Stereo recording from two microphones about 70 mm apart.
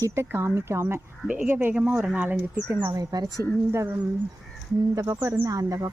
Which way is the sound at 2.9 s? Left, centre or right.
Right.